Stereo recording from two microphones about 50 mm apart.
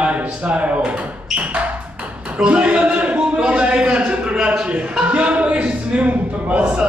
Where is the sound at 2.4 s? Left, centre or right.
Right.